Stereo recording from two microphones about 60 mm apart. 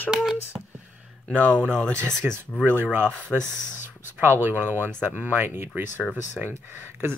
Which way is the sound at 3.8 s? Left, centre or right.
Right.